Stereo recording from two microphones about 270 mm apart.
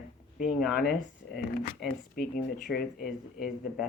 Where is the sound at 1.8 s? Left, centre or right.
Left.